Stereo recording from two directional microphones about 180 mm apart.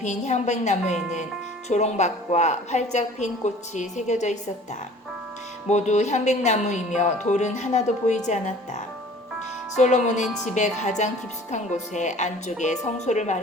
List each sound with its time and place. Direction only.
0.0 s a woman's voice: 40° left (ahead or behind)
5.6 s a woman's voice: 40° left (ahead or behind)